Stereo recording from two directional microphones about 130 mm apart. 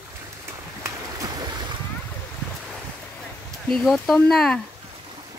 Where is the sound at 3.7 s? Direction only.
Centre (ahead or behind).